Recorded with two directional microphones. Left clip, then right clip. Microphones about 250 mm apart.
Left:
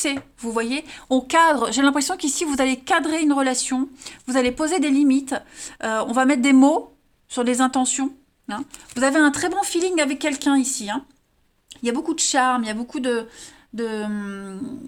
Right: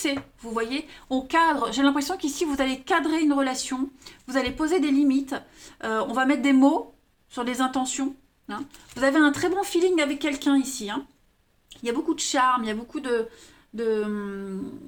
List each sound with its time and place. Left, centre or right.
0.0 s a woman's voice: left